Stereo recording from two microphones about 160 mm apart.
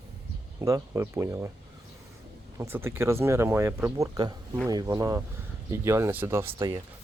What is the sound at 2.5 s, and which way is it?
Speech, 15° right (ahead or behind).